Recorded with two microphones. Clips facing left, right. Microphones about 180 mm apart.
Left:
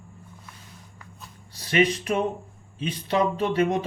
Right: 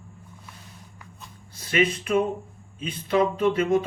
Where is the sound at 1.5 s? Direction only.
35° left (ahead or behind).